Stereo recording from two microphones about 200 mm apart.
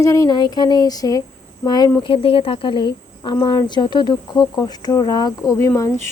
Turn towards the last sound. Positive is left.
turn(degrees=15)  # may be behind; listen again after turning